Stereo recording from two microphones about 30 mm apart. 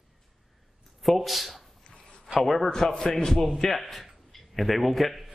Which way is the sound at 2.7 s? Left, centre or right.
Centre.